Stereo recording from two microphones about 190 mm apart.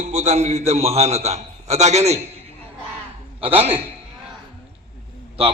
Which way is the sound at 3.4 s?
30° right (ahead or behind).